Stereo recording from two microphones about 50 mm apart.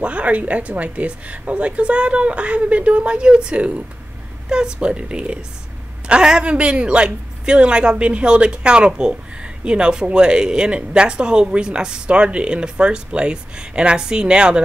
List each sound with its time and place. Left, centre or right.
0.0 s a woman's voice: right